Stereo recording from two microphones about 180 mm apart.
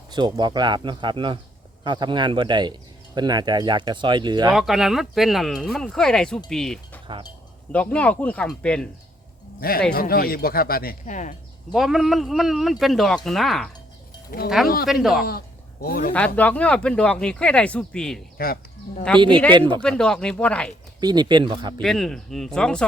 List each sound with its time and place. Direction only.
0.1 s speech: 25° right (ahead or behind)
4.5 s speech: centre (ahead or behind)
9.6 s speech: 55° left (ahead or behind)
11.7 s speech: centre (ahead or behind)
14.3 s speech: 55° left (ahead or behind)
16.1 s speech: 10° left (ahead or behind)
18.3 s speech: 55° left (ahead or behind)
19.1 s speech: 5° left (ahead or behind)
21.0 s speech: 25° right (ahead or behind)
21.8 s speech: centre (ahead or behind)